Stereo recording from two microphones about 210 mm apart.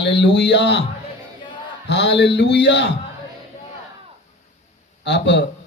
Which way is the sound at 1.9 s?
55° left (ahead or behind).